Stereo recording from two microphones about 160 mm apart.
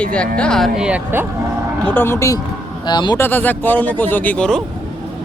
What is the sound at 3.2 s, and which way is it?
Speech, 10° left (ahead or behind).